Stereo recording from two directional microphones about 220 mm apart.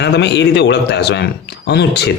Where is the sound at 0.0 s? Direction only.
50° left (ahead or behind).